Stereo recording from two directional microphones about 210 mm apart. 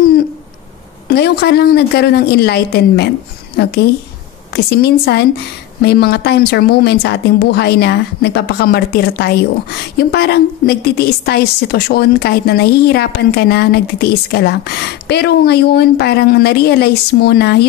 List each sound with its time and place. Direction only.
1.1 s a woman's voice: 50° left (ahead or behind)
4.6 s a woman's voice: 50° left (ahead or behind)